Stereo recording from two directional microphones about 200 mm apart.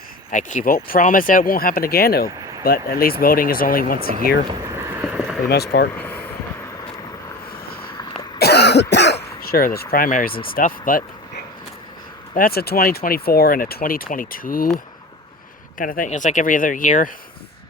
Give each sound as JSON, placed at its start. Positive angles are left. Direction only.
{"t": 0.3, "sound": "speech", "side_deg": 40}
{"t": 4.7, "sound": "vehicle", "side_deg": -10}
{"t": 6.0, "sound": "vehicle", "side_deg": 10}
{"t": 8.4, "sound": "cough", "side_deg": 55}
{"t": 10.5, "sound": "speech", "side_deg": 45}
{"t": 12.3, "sound": "speech", "side_deg": 45}
{"t": 15.8, "sound": "speech", "side_deg": 40}